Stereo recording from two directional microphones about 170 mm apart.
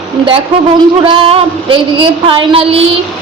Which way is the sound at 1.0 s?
30° right (ahead or behind).